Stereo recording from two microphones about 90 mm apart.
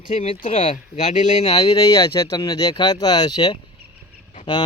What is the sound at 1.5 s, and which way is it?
Speech, 50° left (ahead or behind).